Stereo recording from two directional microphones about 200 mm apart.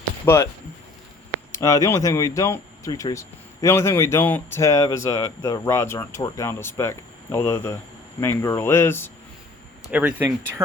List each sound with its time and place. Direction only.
0.3 s speech: 10° left (ahead or behind)
1.5 s speech: 15° left (ahead or behind)
9.9 s speech: 5° right (ahead or behind)